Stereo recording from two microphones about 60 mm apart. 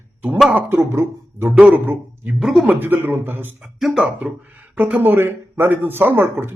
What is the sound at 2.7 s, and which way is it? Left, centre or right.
Speech, right.